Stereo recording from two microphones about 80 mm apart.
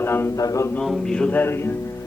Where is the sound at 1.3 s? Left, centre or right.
Left.